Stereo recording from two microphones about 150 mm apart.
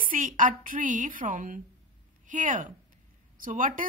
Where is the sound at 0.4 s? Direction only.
65° right (ahead or behind).